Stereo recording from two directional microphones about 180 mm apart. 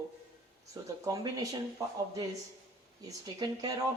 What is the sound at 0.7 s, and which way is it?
Speech, 20° right (ahead or behind).